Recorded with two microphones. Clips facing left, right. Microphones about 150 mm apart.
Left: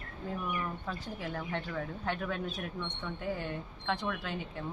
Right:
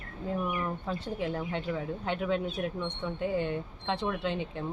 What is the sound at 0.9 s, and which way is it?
Speech, 20° right (ahead or behind).